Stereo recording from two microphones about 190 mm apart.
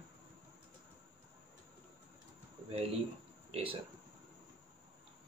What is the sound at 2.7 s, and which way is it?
Speech, 30° right (ahead or behind).